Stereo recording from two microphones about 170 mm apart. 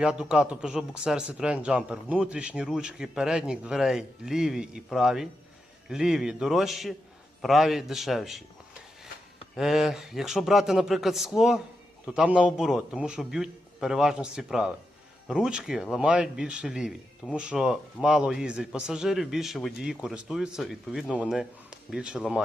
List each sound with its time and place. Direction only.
0.0 s a man's voice: 5° right (ahead or behind)
9.6 s a man's voice: centre (ahead or behind)